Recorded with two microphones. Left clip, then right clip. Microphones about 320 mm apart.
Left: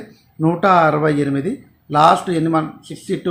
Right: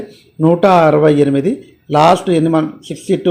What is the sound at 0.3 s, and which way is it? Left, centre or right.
Speech, centre.